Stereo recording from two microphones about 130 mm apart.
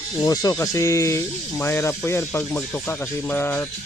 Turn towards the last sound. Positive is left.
turn(degrees=15)  # may be behind; listen again after turning